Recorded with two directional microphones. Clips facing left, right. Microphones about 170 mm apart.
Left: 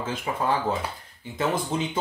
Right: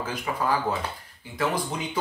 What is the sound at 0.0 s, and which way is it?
Speech, 25° left (ahead or behind).